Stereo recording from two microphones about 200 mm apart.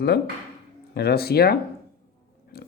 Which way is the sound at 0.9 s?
50° left (ahead or behind).